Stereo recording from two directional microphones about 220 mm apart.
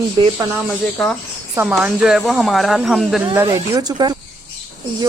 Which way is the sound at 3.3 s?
15° right (ahead or behind).